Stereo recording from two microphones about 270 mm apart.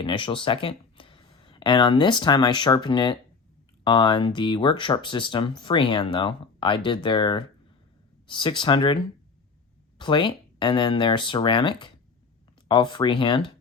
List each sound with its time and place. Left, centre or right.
0.0 s speech: centre